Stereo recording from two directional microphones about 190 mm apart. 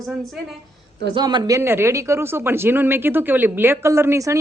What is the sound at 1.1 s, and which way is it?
Speech, 25° right (ahead or behind).